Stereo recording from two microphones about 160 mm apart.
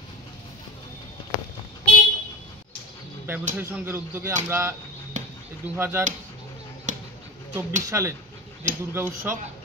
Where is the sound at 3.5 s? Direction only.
15° right (ahead or behind).